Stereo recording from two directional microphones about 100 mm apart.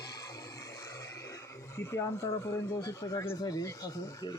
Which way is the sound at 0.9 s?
30° left (ahead or behind).